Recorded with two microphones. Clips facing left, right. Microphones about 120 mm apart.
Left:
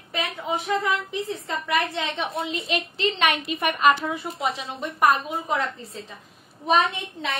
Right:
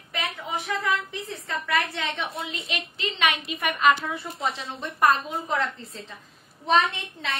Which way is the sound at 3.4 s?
40° left (ahead or behind).